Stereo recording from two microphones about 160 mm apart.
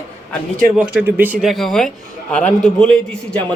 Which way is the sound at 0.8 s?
5° right (ahead or behind).